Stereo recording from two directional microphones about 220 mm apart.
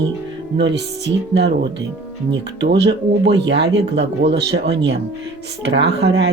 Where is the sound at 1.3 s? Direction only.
50° right (ahead or behind).